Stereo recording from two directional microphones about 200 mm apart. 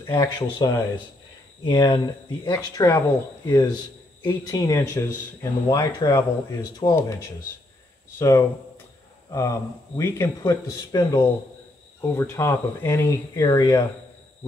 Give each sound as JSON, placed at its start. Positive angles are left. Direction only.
{"t": 0.1, "sound": "speech", "side_deg": 20}
{"t": 8.2, "sound": "speech", "side_deg": 15}